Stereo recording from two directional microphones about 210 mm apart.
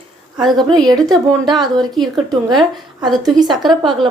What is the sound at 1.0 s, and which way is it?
A woman's voice, centre (ahead or behind).